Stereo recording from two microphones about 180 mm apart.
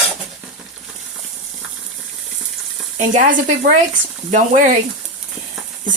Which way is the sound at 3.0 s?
45° right (ahead or behind).